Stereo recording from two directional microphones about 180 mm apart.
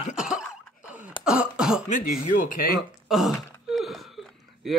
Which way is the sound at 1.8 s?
45° left (ahead or behind).